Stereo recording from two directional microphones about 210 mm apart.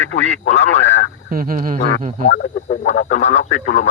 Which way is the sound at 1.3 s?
45° right (ahead or behind).